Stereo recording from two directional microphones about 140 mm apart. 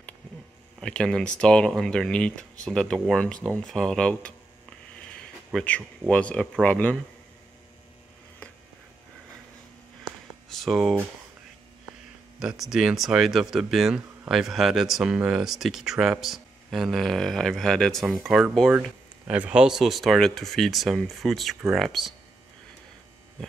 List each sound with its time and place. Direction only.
0.7 s speech: 5° left (ahead or behind)
5.5 s speech: 5° left (ahead or behind)
10.5 s speech: centre (ahead or behind)
12.4 s speech: 5° right (ahead or behind)